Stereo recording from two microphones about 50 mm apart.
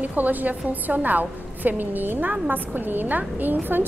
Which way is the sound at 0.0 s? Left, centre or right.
Right.